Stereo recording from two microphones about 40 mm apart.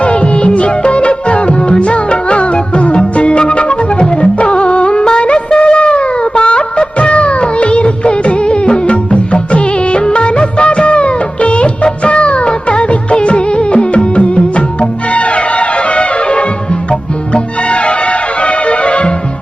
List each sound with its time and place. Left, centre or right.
0.0 s music: left